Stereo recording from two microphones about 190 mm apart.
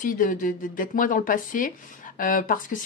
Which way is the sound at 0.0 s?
45° left (ahead or behind).